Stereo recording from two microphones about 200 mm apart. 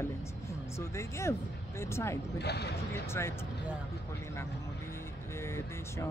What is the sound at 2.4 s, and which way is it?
Speech, 55° left (ahead or behind).